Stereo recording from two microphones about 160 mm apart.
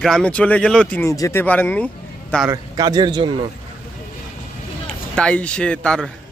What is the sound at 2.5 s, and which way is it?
A man's voice, 25° right (ahead or behind).